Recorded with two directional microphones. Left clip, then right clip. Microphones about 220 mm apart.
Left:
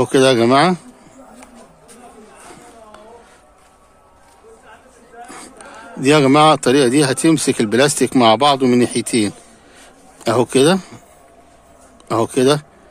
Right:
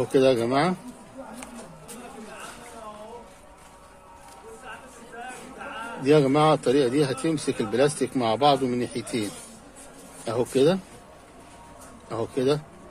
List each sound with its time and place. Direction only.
0.0 s speech: 45° left (ahead or behind)
6.0 s speech: 45° left (ahead or behind)
12.1 s speech: 45° left (ahead or behind)